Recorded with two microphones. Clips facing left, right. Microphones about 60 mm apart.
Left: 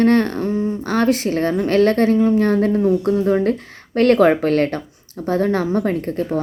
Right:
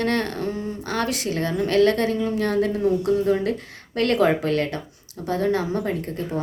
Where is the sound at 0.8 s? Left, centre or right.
Left.